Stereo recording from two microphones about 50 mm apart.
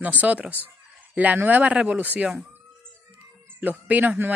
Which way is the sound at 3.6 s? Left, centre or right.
Right.